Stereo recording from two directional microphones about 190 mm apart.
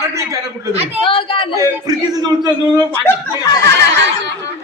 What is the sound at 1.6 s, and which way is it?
A man's voice, 20° right (ahead or behind).